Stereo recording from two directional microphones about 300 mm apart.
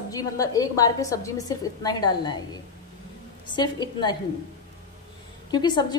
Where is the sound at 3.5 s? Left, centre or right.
Centre.